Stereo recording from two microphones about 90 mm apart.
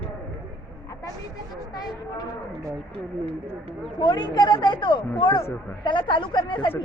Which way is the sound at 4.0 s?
55° left (ahead or behind).